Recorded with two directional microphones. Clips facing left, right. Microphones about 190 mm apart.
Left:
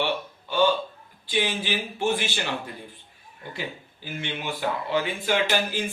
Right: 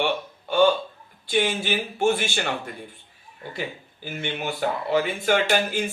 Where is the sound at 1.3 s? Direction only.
50° right (ahead or behind).